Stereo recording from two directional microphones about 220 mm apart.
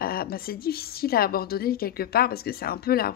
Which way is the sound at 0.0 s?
45° left (ahead or behind).